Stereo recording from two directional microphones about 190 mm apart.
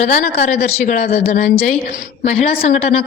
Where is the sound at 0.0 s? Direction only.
35° left (ahead or behind).